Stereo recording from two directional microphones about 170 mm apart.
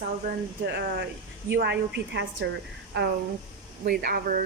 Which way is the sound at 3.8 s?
65° right (ahead or behind).